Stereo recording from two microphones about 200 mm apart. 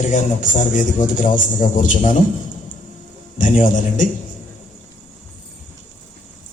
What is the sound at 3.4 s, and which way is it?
Speech, 40° left (ahead or behind).